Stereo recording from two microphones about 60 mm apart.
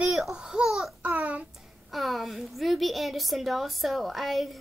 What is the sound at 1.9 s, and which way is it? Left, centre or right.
A woman's voice, centre.